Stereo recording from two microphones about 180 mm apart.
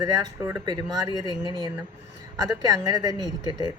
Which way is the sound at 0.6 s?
25° right (ahead or behind).